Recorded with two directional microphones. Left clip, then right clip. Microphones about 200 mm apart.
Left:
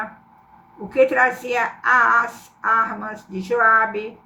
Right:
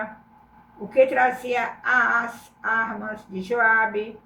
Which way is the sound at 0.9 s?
25° left (ahead or behind).